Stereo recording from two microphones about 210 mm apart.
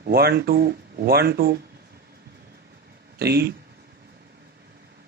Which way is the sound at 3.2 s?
50° right (ahead or behind).